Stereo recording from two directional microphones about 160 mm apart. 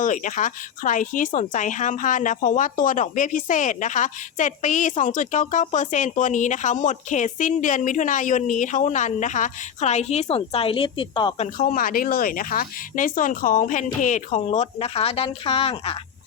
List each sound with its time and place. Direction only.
0.0 s speech: 50° left (ahead or behind); by 11.4 s 30° left (ahead or behind)
11.5 s speech: 55° left (ahead or behind); by 16.0 s 35° left (ahead or behind)